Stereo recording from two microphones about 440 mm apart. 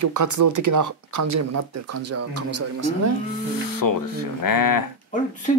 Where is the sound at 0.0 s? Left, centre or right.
Right.